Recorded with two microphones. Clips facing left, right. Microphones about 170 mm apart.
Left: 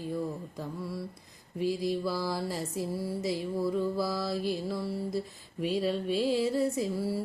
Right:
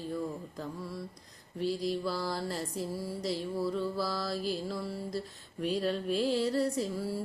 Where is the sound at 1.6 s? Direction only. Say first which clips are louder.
Left 2 dB; 5° left (ahead or behind).